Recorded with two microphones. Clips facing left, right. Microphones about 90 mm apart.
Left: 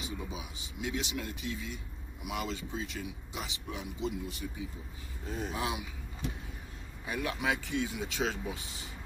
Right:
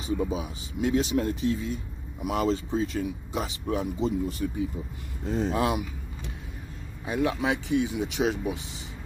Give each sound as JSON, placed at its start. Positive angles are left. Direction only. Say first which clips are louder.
{"t": 0.0, "sound": "speech", "louder": "right 12 dB", "side_deg": -40}
{"t": 5.5, "sound": "speech", "louder": "right 9 dB", "side_deg": -60}
{"t": 7.1, "sound": "speech", "louder": "right 7 dB", "side_deg": -30}